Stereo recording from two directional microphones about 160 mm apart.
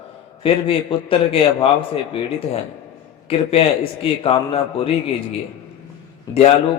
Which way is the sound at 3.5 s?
35° left (ahead or behind).